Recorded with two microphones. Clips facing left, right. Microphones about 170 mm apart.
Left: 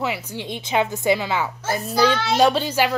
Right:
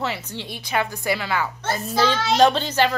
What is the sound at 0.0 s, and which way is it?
A woman's voice, 10° left (ahead or behind).